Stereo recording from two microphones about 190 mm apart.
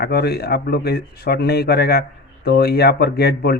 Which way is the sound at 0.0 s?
55° left (ahead or behind).